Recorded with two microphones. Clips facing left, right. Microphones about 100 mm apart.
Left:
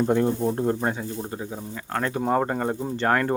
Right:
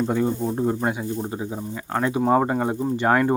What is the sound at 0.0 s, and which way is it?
Speech, centre (ahead or behind).